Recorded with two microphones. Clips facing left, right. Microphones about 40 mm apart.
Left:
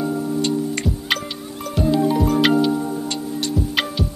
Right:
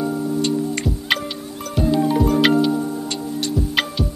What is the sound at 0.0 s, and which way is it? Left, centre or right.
Music, centre.